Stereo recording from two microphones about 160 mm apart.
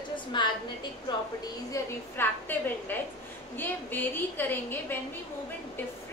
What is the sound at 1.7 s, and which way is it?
A woman's voice, 15° left (ahead or behind).